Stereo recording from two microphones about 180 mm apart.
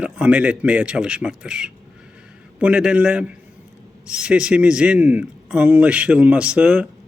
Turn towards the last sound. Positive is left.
turn(degrees=-5)  # may be behind; listen again after turning